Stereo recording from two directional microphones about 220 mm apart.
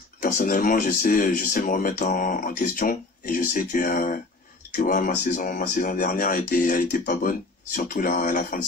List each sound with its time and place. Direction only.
0.2 s speech: 35° left (ahead or behind)